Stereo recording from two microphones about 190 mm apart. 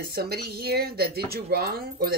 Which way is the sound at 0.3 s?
55° right (ahead or behind).